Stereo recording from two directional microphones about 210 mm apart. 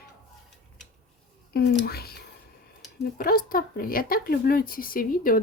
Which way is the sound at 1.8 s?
45° left (ahead or behind).